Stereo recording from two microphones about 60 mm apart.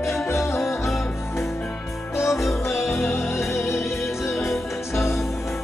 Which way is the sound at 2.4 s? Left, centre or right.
Centre.